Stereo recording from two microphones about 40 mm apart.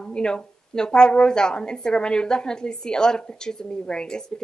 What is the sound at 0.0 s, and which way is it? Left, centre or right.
Speech, left.